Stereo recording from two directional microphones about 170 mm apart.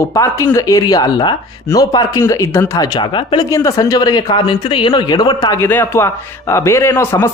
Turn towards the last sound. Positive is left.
turn(degrees=15)  # may be behind; listen again after turning